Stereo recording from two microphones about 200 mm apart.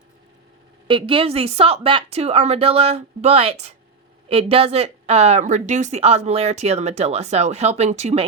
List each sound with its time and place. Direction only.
0.9 s speech: 25° right (ahead or behind)